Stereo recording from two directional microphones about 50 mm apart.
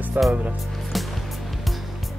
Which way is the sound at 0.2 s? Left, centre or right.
Right.